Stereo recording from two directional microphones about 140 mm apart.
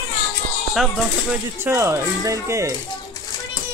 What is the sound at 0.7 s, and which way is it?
Speech, centre (ahead or behind).